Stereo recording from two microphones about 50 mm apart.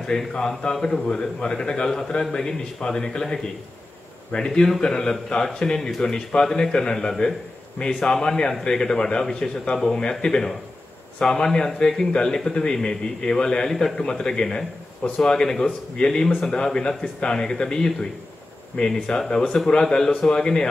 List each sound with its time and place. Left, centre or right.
0.3 s a man's voice: centre
4.6 s a man's voice: centre